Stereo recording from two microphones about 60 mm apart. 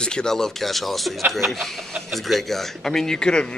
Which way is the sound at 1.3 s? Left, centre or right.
Centre.